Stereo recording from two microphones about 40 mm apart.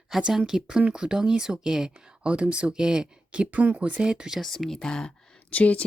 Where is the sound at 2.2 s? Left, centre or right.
Right.